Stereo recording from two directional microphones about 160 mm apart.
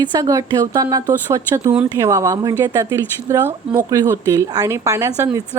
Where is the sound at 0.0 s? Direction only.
25° right (ahead or behind).